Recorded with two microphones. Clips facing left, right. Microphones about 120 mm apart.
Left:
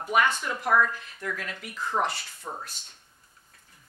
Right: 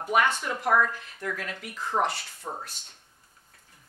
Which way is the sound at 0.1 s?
40° right (ahead or behind).